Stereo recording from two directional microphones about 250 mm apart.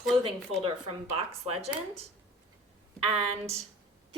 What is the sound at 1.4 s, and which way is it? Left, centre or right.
Speech, right.